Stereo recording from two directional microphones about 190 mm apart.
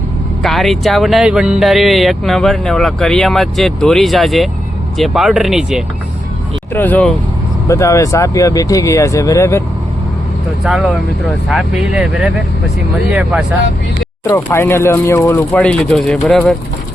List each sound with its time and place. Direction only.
0.4 s speech: centre (ahead or behind)
6.7 s speech: 10° left (ahead or behind)
10.6 s speech: centre (ahead or behind)
14.3 s speech: 15° left (ahead or behind)